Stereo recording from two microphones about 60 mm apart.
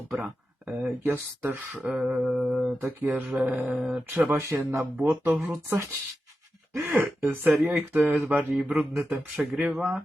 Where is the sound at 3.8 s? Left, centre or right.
Centre.